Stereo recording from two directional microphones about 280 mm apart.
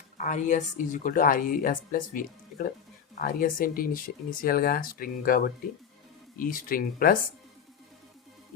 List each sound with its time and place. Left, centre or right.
0.2 s speech: left